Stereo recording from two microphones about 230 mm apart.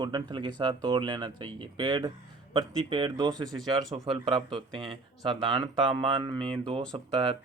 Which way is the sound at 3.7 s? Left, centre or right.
Centre.